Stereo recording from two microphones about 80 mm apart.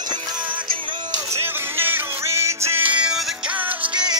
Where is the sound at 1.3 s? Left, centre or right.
Right.